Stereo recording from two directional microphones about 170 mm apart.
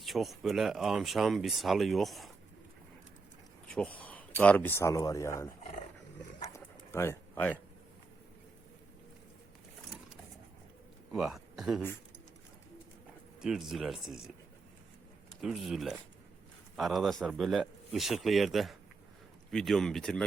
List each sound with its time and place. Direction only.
0.0 s speech: centre (ahead or behind)
3.7 s a sound: 5° left (ahead or behind)
4.4 s speech: 10° left (ahead or behind)
6.5 s pigeon: 15° left (ahead or behind)
11.1 s speech: 5° right (ahead or behind)
13.4 s speech: centre (ahead or behind)
15.4 s speech: centre (ahead or behind)